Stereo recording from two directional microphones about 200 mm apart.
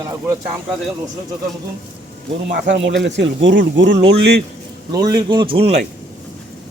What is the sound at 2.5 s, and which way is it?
Speech, 65° right (ahead or behind).